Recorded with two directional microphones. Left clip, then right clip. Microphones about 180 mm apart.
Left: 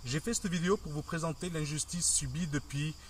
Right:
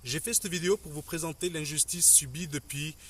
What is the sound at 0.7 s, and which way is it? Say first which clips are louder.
Speech: right 3 dB; 35° right (ahead or behind).